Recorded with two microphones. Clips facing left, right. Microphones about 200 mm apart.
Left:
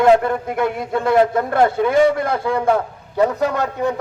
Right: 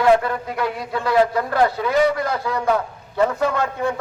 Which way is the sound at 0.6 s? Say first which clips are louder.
Left 4 dB; 50° left (ahead or behind).